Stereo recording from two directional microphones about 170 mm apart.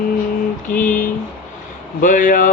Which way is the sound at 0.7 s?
10° left (ahead or behind).